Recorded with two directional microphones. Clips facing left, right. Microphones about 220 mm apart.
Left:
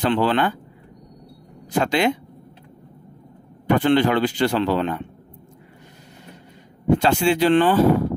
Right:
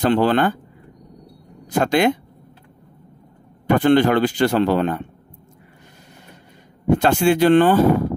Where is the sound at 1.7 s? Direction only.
45° right (ahead or behind).